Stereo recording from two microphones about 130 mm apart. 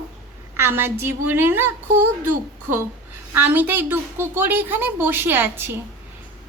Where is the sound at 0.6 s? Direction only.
15° right (ahead or behind).